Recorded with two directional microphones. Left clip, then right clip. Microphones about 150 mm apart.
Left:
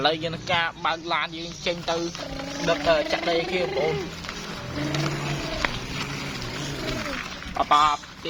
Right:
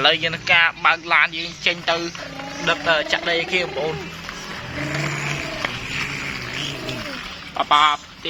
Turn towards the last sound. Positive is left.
turn(degrees=-20)  # may be behind; listen again after turning